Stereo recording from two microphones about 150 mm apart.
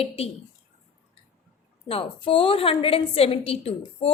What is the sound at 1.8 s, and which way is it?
A woman's voice, 40° left (ahead or behind).